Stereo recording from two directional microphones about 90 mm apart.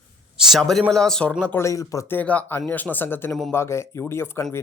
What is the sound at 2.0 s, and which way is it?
Speech, 20° left (ahead or behind).